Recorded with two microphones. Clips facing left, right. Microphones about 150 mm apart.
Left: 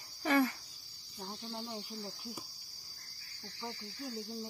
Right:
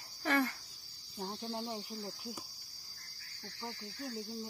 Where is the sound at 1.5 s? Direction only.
20° right (ahead or behind).